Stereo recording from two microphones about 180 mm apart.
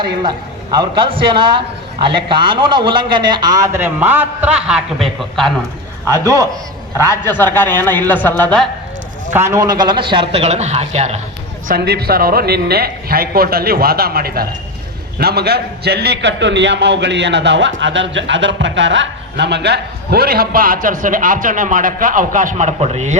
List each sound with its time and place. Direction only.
0.0 s a man's voice: 25° right (ahead or behind); by 5.5 s centre (ahead or behind)
6.1 s a man's voice: 15° left (ahead or behind)
9.3 s a man's voice: 15° right (ahead or behind); by 11.2 s 35° right (ahead or behind)
11.7 s a man's voice: 60° right (ahead or behind); by 23.1 s 40° right (ahead or behind)